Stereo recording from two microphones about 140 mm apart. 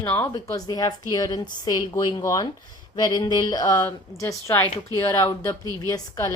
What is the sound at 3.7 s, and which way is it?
Speech, 20° left (ahead or behind).